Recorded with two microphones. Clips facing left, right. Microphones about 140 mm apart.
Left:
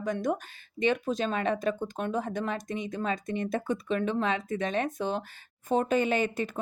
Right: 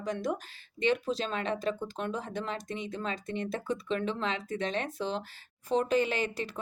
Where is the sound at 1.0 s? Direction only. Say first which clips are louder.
Left 4 dB; 50° left (ahead or behind).